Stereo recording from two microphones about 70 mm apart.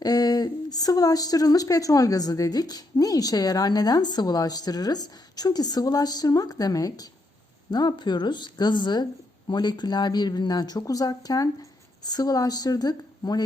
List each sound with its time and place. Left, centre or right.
0.0 s a woman's voice: left
7.7 s speech: left